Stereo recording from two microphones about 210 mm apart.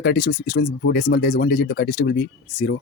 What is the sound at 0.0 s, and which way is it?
Speech, 45° left (ahead or behind).